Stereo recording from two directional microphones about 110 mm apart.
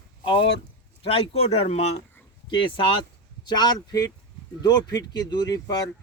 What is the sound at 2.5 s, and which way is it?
Speech, 50° left (ahead or behind).